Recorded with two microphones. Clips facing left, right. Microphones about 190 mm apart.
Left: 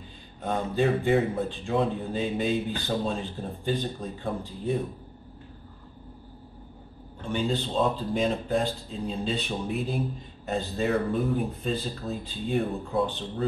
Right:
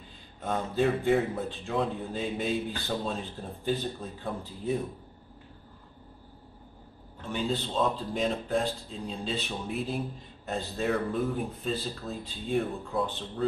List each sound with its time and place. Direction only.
0.5 s speech: centre (ahead or behind)
7.2 s speech: centre (ahead or behind)